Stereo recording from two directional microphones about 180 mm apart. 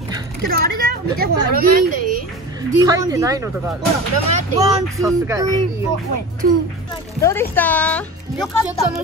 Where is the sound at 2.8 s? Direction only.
20° right (ahead or behind).